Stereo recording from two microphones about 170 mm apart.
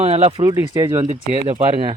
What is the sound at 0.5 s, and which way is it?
Speech, 20° right (ahead or behind).